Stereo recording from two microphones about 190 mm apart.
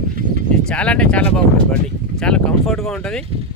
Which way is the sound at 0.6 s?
5° left (ahead or behind).